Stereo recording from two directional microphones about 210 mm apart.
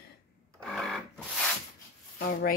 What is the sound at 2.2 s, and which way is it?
Speech, 45° left (ahead or behind).